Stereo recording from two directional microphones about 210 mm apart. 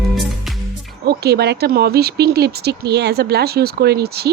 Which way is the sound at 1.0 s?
50° right (ahead or behind).